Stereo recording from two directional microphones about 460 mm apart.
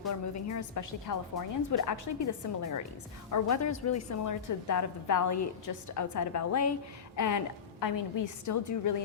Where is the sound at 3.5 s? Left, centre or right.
Left.